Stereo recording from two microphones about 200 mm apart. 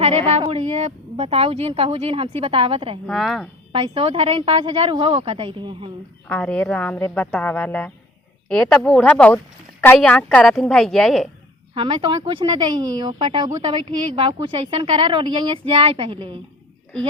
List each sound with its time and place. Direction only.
0.0 s a woman's voice: 30° right (ahead or behind)
3.1 s a woman's voice: centre (ahead or behind)
3.7 s a woman's voice: 25° right (ahead or behind)
6.2 s a woman's voice: 5° left (ahead or behind)
11.7 s a woman's voice: 25° right (ahead or behind)